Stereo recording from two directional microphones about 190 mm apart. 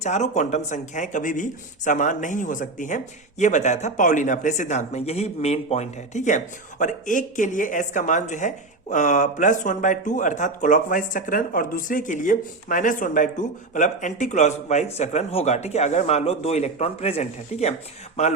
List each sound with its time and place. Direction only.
0.0 s speech: 40° left (ahead or behind)